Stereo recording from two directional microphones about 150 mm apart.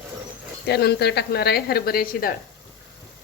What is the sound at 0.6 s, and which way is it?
Speech, 90° left.